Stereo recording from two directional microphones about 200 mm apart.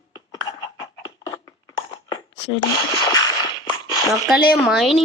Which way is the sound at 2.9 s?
20° left (ahead or behind).